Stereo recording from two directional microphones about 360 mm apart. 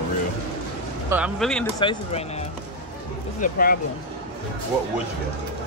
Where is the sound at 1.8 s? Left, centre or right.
Centre.